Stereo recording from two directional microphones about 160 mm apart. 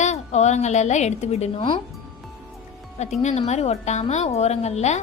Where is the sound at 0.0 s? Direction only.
45° left (ahead or behind).